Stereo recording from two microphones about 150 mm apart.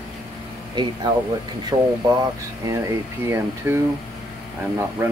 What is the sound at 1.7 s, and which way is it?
Speech, 30° right (ahead or behind).